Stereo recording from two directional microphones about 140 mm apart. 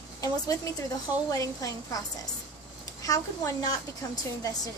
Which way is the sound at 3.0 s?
25° left (ahead or behind).